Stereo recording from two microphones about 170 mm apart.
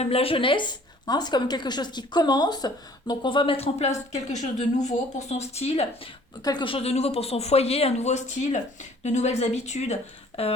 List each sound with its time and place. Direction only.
0.0 s a woman's voice: 35° left (ahead or behind)
6.4 s speech: 25° left (ahead or behind)